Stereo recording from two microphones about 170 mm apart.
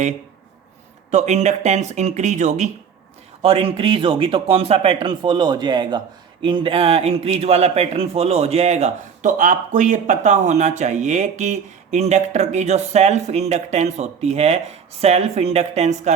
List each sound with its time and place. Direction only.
1.1 s a man's voice: 40° right (ahead or behind)